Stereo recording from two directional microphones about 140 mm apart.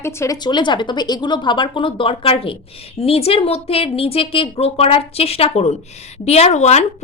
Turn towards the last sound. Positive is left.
turn(degrees=55)  # may be behind; listen again after turning